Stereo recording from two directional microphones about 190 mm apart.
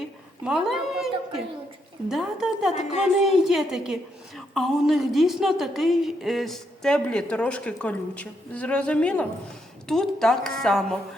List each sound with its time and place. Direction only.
0.4 s a woman's voice: centre (ahead or behind)
2.7 s speech: 35° left (ahead or behind)
3.2 s a woman's voice: centre (ahead or behind)